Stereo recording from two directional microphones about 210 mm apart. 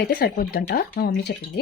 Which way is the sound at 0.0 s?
45° left (ahead or behind).